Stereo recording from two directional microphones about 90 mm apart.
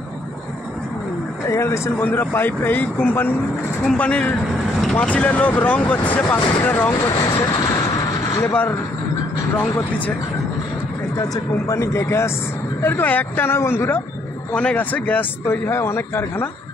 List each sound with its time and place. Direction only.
1.5 s speech: 30° left (ahead or behind)
6.3 s speech: 25° left (ahead or behind)
6.9 s speech: 45° left (ahead or behind)
9.6 s speech: 20° left (ahead or behind)
11.7 s speech: 35° left (ahead or behind)
14.5 s speech: 15° left (ahead or behind)